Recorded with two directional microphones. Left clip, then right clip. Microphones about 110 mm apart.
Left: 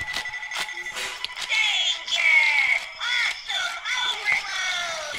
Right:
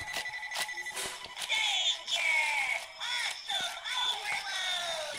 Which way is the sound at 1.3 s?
25° right (ahead or behind).